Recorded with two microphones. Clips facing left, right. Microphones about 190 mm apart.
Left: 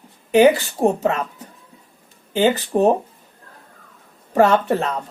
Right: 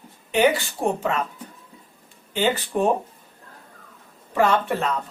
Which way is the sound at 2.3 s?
40° left (ahead or behind).